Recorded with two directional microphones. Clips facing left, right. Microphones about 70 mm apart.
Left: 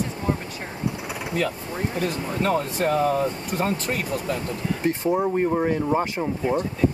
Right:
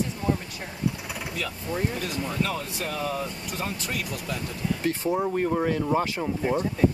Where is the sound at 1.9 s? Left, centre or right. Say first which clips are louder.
Left 3 dB; left.